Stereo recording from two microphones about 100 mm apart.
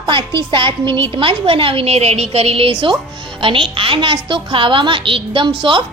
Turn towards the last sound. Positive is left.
turn(degrees=-55)  # may be behind; listen again after turning